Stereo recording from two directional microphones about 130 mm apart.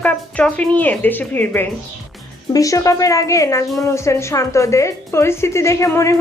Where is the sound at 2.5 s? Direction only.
25° left (ahead or behind).